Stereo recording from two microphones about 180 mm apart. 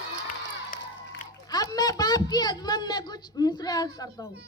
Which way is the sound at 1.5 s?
20° left (ahead or behind).